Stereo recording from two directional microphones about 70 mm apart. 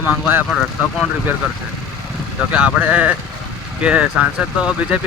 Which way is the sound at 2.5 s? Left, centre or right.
Centre.